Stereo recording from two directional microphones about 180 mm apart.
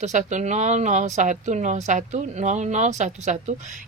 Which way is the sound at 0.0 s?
40° right (ahead or behind).